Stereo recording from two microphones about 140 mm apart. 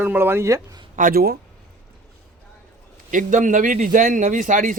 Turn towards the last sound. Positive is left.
turn(degrees=-70)  # may be behind; listen again after turning